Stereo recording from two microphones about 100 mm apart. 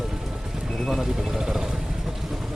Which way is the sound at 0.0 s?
5° right (ahead or behind).